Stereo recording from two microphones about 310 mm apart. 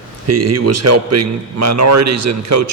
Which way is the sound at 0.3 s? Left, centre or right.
Right.